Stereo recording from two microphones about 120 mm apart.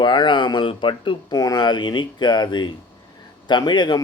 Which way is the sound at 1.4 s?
30° left (ahead or behind).